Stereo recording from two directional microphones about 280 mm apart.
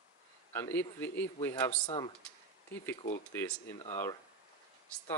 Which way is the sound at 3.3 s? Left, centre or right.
Centre.